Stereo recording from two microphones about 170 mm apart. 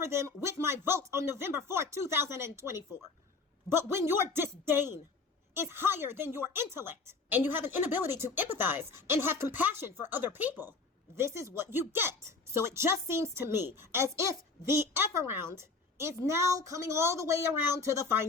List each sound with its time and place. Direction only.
0.0 s speech: 15° right (ahead or behind)